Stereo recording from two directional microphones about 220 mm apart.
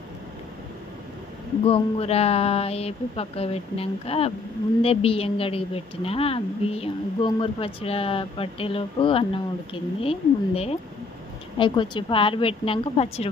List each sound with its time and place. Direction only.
1.6 s speech: 25° left (ahead or behind)